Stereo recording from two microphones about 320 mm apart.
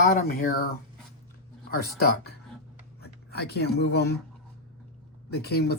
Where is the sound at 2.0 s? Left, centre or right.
Left.